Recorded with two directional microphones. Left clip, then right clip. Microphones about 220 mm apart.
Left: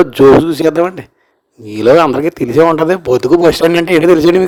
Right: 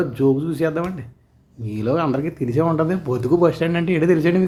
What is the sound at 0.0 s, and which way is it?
Speech, 45° left (ahead or behind).